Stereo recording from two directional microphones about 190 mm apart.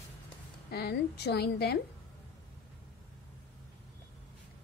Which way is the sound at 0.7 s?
55° left (ahead or behind).